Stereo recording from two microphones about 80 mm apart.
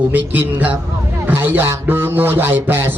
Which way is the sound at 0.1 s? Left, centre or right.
Right.